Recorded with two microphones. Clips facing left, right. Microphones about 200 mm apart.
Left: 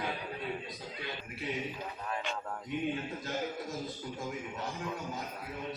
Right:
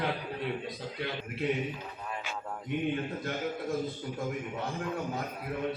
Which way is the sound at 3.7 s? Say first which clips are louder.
Right 6 dB; 60° right (ahead or behind).